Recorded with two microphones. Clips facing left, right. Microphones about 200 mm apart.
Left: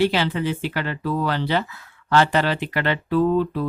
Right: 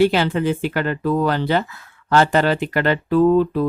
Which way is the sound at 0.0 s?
50° right (ahead or behind).